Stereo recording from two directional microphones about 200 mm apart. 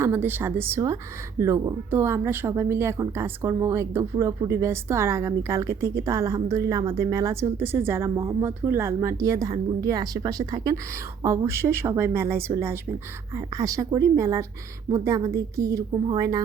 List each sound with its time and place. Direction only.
0.0 s speech: 10° right (ahead or behind)